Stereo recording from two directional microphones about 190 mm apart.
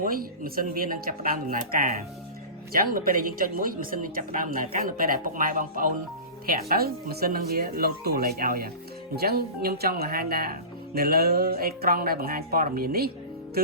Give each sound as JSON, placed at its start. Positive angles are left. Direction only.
{"t": 0.0, "sound": "speech", "side_deg": -50}